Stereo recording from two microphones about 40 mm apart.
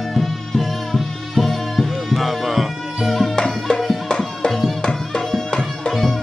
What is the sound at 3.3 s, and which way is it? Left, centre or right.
Music, centre.